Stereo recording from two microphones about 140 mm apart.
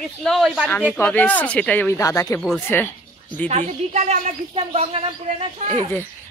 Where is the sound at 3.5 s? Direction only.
55° right (ahead or behind).